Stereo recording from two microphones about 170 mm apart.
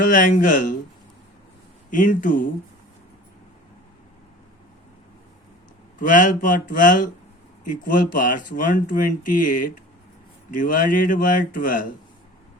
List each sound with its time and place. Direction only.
0.0 s speech: 50° left (ahead or behind)
1.9 s speech: 50° left (ahead or behind)
6.0 s speech: 50° left (ahead or behind)